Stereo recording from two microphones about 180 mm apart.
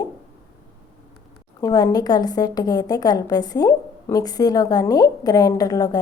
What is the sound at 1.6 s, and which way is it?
A woman's voice, 20° left (ahead or behind).